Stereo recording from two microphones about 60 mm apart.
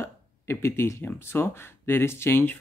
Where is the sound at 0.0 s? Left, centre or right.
Left.